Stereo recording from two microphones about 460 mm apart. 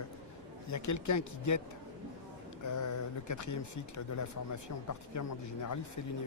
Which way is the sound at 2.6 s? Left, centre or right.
Left.